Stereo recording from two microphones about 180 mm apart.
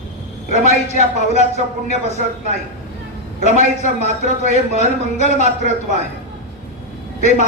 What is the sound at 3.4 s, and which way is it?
A man's voice, 40° left (ahead or behind).